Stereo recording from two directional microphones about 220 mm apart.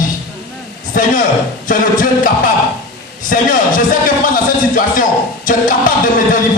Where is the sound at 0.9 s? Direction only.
40° left (ahead or behind).